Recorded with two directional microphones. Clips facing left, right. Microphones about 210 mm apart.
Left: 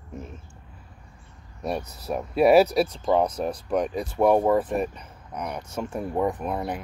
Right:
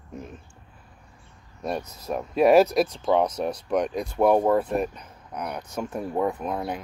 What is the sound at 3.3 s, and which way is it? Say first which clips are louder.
Speech: even; 35° left (ahead or behind).